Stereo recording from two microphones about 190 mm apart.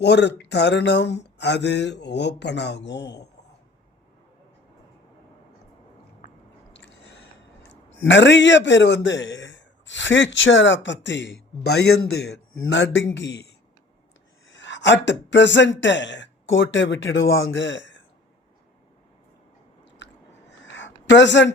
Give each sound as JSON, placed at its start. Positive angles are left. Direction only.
{"t": 0.0, "sound": "speech", "side_deg": 65}
{"t": 6.7, "sound": "chewing", "side_deg": 70}
{"t": 7.7, "sound": "a man's voice", "side_deg": 75}
{"t": 12.7, "sound": "a man's voice", "side_deg": 70}
{"t": 20.0, "sound": "chewing", "side_deg": 70}
{"t": 20.7, "sound": "a sound", "side_deg": 70}